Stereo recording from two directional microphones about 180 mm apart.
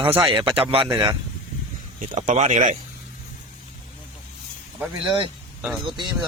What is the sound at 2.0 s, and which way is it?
Speech, 40° right (ahead or behind).